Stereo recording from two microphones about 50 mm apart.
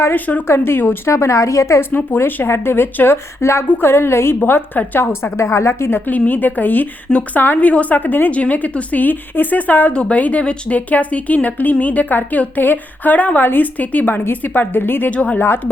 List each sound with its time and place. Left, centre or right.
0.1 s a woman's voice: left
0.4 s speech: left
1.0 s a woman's voice: left
2.1 s speech: left
3.4 s a woman's voice: left
3.7 s a woman's voice: left
4.4 s a woman's voice: left
5.5 s a woman's voice: left
5.9 s a woman's voice: left
7.7 s a woman's voice: left
15.1 s speech: left
15.4 s speech: left